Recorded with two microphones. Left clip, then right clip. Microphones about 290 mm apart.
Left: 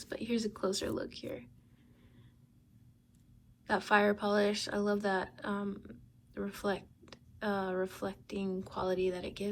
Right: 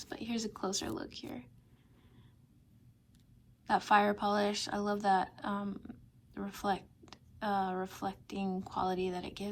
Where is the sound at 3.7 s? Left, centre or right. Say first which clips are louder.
Right 1 dB; centre.